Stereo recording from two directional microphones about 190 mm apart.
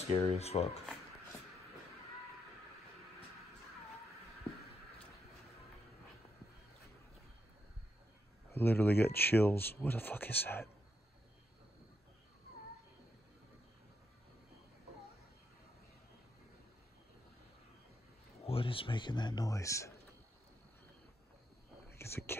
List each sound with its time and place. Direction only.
0.3 s speech: 35° left (ahead or behind)
8.5 s speech: 10° left (ahead or behind)
18.5 s speech: 30° left (ahead or behind)
21.9 s speech: 15° left (ahead or behind)